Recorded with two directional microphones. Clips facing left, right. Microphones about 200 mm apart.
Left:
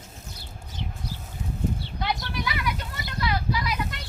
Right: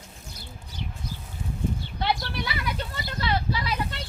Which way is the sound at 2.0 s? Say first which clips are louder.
Right 3 dB; 30° right (ahead or behind).